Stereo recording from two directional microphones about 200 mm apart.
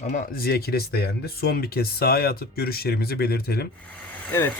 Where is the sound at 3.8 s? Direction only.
10° left (ahead or behind).